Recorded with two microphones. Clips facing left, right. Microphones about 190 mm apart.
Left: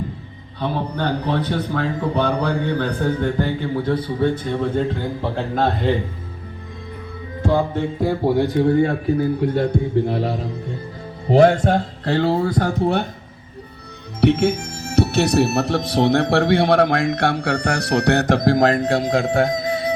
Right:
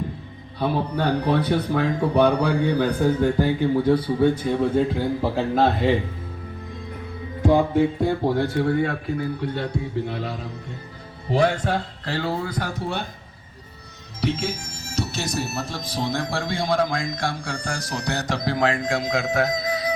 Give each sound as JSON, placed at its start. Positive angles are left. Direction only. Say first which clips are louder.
{"t": 0.6, "sound": "speech", "louder": "even", "side_deg": -10}
{"t": 7.4, "sound": "music", "louder": "right 2 dB", "side_deg": -10}
{"t": 8.0, "sound": "speech", "louder": "left 3 dB", "side_deg": 10}
{"t": 9.4, "sound": "a man's voice", "louder": "left 8 dB", "side_deg": 45}
{"t": 11.3, "sound": "a man's voice", "louder": "left 7 dB", "side_deg": 50}
{"t": 12.8, "sound": "speech", "louder": "left 10 dB", "side_deg": 60}
{"t": 14.2, "sound": "speech", "louder": "left 9 dB", "side_deg": 60}